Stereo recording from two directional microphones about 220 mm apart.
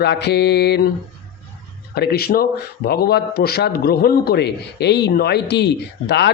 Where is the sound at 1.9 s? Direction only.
45° left (ahead or behind).